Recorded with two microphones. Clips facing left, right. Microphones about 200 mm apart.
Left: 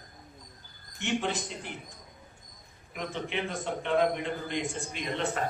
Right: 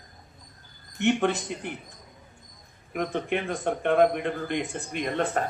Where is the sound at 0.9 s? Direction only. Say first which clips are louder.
Right 7 dB; 60° right (ahead or behind).